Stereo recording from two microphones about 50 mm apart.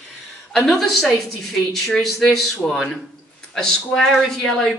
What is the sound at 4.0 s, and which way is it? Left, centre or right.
Speech, centre.